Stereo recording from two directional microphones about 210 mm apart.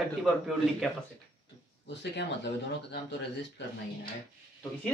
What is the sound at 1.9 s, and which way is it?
Speech, 55° left (ahead or behind).